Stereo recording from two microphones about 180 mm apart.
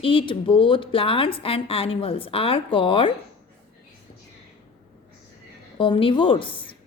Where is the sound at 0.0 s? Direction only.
30° left (ahead or behind).